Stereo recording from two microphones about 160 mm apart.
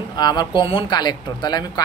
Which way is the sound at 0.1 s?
25° left (ahead or behind).